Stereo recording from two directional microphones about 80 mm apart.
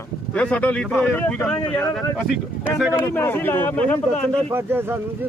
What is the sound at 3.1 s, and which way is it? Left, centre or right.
Speech, left.